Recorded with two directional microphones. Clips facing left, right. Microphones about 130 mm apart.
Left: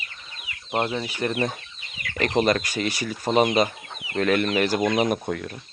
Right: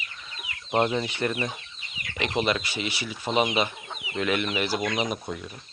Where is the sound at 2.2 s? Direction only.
40° left (ahead or behind).